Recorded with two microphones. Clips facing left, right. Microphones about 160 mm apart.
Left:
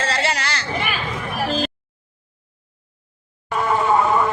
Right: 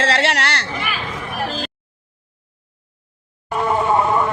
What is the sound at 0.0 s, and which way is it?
Chatter, 75° right (ahead or behind).